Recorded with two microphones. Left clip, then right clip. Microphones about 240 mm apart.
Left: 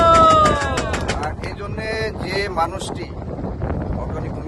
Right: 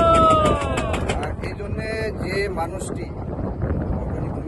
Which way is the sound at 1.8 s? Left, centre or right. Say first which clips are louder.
Left 3 dB; centre.